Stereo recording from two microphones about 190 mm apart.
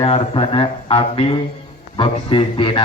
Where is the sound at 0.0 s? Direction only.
30° left (ahead or behind).